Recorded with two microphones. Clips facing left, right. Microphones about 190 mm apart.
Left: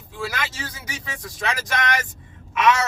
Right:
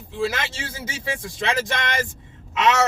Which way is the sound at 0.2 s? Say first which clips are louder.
Right 4 dB; 25° right (ahead or behind).